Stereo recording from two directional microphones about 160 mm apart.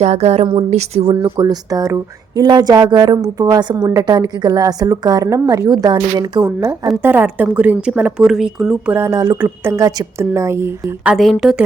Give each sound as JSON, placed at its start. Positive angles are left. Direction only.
{"t": 0.0, "sound": "a woman's voice", "side_deg": -45}
{"t": 1.1, "sound": "speech", "side_deg": -25}
{"t": 6.8, "sound": "speech", "side_deg": -10}
{"t": 9.0, "sound": "speech", "side_deg": -20}